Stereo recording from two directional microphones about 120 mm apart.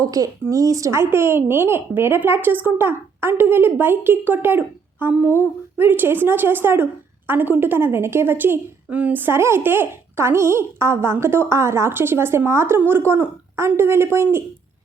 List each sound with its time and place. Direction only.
0.0 s a woman's voice: 30° right (ahead or behind)